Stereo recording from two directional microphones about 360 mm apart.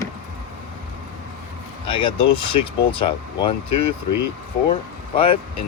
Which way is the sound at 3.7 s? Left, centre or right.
Left.